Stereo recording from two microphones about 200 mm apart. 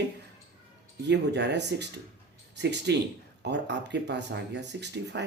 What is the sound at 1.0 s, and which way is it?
Speech, 60° right (ahead or behind).